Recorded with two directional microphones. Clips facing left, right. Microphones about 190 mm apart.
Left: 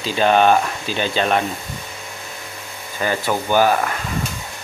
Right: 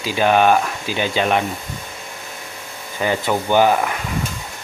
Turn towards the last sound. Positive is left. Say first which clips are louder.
# right 1 dB
turn(degrees=-15)  # may be behind; listen again after turning